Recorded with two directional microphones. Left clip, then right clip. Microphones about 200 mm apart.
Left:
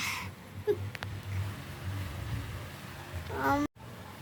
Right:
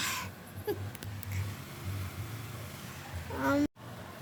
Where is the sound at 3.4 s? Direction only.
25° left (ahead or behind).